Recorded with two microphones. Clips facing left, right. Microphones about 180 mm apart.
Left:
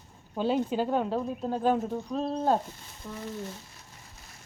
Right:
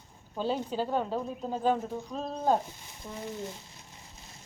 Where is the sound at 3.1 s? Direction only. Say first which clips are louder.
Left 1 dB; 20° right (ahead or behind).